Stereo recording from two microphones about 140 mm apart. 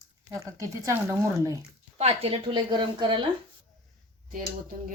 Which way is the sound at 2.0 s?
45° right (ahead or behind).